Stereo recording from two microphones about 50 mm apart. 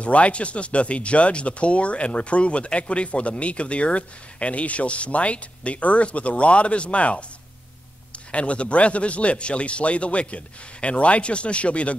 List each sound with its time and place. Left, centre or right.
0.0 s speech: left